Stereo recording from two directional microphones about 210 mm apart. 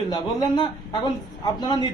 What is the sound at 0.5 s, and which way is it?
Speech, 20° left (ahead or behind).